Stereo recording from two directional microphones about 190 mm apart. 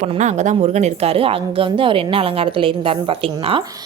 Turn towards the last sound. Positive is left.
turn(degrees=-30)  # may be behind; listen again after turning